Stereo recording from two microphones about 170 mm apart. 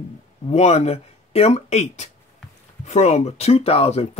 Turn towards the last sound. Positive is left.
turn(degrees=35)  # may be behind; listen again after turning